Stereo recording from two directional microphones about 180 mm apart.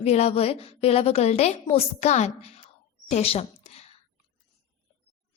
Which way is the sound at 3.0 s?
35° left (ahead or behind).